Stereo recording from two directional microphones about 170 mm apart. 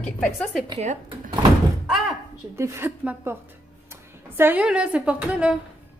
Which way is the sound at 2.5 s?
15° right (ahead or behind).